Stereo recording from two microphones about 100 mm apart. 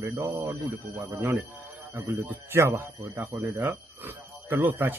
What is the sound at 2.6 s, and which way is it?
Speech, 30° right (ahead or behind).